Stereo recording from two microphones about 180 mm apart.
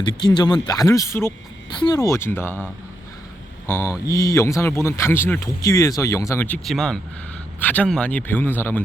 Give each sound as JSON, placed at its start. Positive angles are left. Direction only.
{"t": 0.0, "sound": "speech", "side_deg": 20}
{"t": 3.7, "sound": "speech", "side_deg": 15}